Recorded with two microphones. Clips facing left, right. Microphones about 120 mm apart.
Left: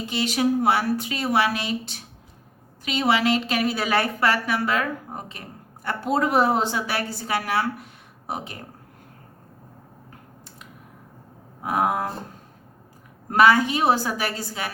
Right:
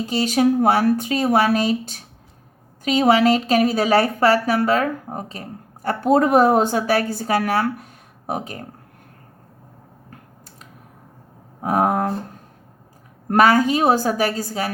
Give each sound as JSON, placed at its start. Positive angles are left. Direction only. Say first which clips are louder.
{"t": 0.0, "sound": "a woman's voice", "louder": "right 5 dB", "side_deg": -40}
{"t": 11.6, "sound": "a woman's voice", "louder": "right 4 dB", "side_deg": -40}
{"t": 13.3, "sound": "a woman's voice", "louder": "right 3 dB", "side_deg": -40}